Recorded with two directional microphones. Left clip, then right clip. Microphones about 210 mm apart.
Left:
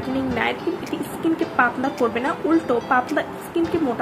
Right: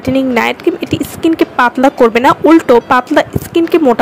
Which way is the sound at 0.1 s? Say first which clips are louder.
Right 11 dB; 50° right (ahead or behind).